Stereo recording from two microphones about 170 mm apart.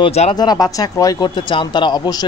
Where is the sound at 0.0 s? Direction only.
35° left (ahead or behind).